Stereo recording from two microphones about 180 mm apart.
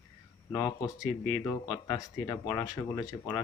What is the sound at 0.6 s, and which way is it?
Speech, 20° left (ahead or behind).